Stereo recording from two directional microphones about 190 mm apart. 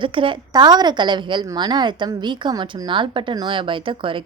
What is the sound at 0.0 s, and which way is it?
A woman's voice, 25° right (ahead or behind).